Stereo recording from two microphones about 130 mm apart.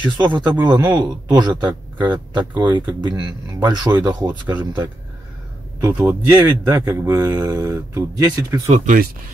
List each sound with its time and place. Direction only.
0.3 s speech: 35° right (ahead or behind)
5.8 s speech: 25° right (ahead or behind)
8.6 s speech: 70° right (ahead or behind)